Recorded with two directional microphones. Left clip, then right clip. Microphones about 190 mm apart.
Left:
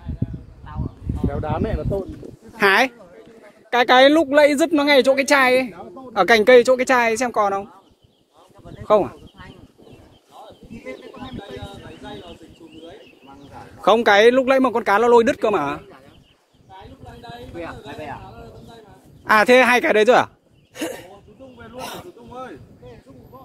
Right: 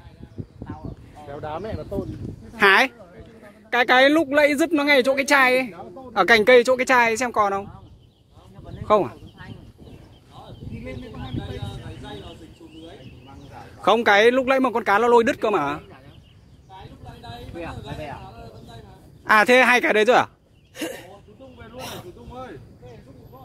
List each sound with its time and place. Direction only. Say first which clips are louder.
1.3 s speech: left 4 dB; 50° left (ahead or behind)
2.5 s speech: even; 5° right (ahead or behind)
8.8 s speech: left 2 dB; centre (ahead or behind)
11.3 s chicken: even; centre (ahead or behind)
13.7 s speech: left 3 dB; centre (ahead or behind)
16.7 s a sound: left 2 dB; centre (ahead or behind)
19.2 s speech: left 2 dB; centre (ahead or behind)
20.7 s a sound: left 3 dB; 40° left (ahead or behind)
21.5 s snake: left 3 dB; 35° left (ahead or behind)